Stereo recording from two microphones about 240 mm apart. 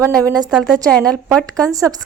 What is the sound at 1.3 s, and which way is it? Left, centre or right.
Speech, centre.